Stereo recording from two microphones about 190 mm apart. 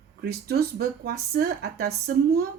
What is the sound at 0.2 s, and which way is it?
Speech, 55° right (ahead or behind).